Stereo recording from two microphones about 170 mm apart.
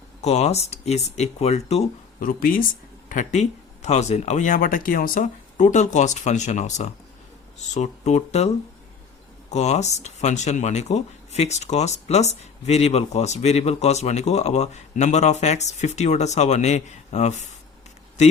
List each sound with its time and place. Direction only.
0.2 s speech: 40° left (ahead or behind)
2.2 s speech: 55° left (ahead or behind)